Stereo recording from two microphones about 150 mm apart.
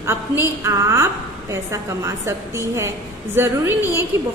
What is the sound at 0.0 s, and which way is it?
A woman's voice, 20° right (ahead or behind).